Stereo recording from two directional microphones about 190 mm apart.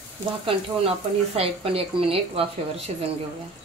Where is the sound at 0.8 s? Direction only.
30° right (ahead or behind).